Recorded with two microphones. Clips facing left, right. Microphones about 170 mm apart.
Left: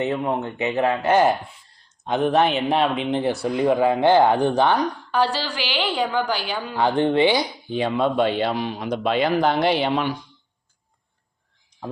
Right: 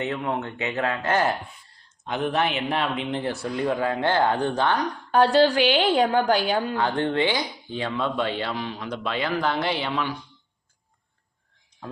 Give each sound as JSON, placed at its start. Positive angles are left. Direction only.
{"t": 0.0, "sound": "speech", "side_deg": 15}
{"t": 5.3, "sound": "a woman's voice", "side_deg": -50}
{"t": 6.7, "sound": "speech", "side_deg": 15}